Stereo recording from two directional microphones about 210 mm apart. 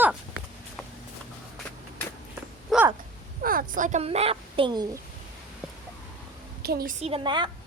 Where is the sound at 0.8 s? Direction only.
5° left (ahead or behind).